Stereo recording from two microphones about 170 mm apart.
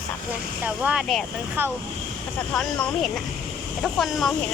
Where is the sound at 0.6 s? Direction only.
5° right (ahead or behind).